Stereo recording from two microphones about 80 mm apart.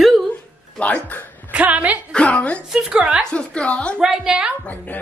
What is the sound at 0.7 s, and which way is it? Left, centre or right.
Speech, centre.